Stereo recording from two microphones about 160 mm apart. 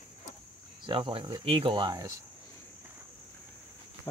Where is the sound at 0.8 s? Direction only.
30° right (ahead or behind).